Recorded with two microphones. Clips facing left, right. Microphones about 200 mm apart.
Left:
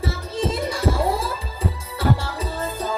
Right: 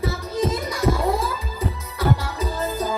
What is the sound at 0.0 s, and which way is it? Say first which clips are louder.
Music: right 2 dB; 30° left (ahead or behind).